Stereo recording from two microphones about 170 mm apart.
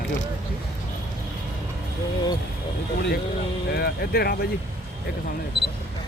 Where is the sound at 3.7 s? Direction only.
65° left (ahead or behind).